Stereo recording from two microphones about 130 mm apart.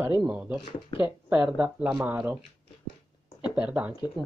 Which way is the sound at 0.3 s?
10° right (ahead or behind).